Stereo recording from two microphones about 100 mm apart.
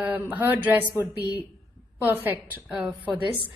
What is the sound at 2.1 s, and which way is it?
Speech, 20° right (ahead or behind).